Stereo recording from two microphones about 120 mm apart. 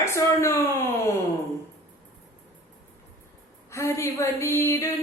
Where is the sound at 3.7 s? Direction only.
25° left (ahead or behind).